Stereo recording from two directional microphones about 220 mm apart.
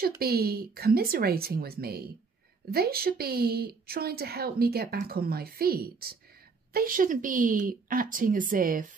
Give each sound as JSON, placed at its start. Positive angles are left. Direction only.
{"t": 0.2, "sound": "a woman's voice", "side_deg": -45}